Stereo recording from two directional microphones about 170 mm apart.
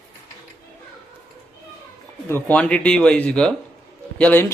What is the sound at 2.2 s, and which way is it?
Speech, 10° left (ahead or behind).